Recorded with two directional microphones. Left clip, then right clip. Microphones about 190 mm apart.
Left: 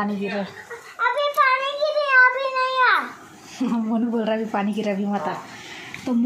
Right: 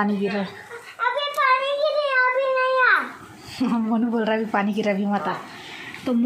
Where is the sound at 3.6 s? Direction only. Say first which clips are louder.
Right 1 dB; 10° right (ahead or behind).